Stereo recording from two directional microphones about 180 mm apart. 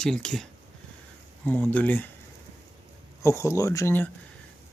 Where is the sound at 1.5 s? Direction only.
5° left (ahead or behind).